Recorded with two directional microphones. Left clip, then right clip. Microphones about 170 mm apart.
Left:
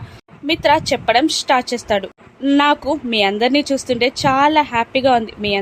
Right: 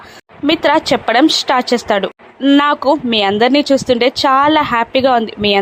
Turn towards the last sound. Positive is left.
turn(degrees=-15)  # may be behind; listen again after turning